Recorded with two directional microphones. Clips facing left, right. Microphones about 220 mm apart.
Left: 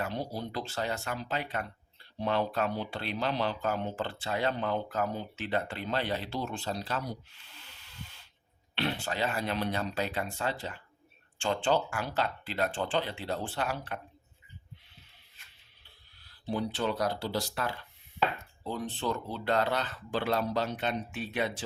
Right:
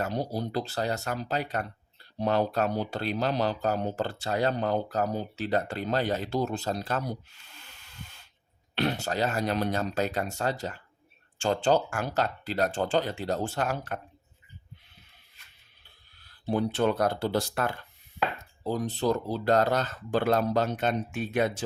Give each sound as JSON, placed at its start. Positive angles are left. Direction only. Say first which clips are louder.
{"t": 0.0, "sound": "speech", "louder": "right 4 dB", "side_deg": -40}
{"t": 16.2, "sound": "speech", "louder": "right 5 dB", "side_deg": -50}